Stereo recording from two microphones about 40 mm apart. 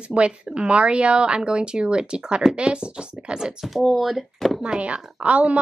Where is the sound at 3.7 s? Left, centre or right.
Centre.